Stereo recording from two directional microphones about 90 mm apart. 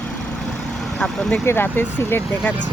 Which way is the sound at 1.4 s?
25° left (ahead or behind).